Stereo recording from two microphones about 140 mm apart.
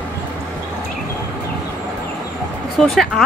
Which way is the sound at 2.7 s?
Centre (ahead or behind).